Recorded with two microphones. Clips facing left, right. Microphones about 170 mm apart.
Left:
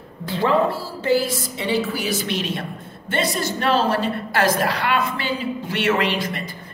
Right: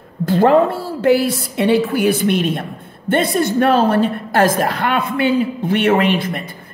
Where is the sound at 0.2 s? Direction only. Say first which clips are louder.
Right 7 dB; 50° right (ahead or behind).